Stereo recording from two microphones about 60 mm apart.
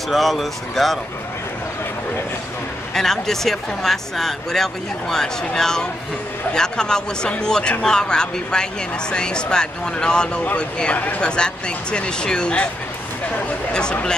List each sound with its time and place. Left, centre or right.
0.1 s speech: centre
2.9 s speech: centre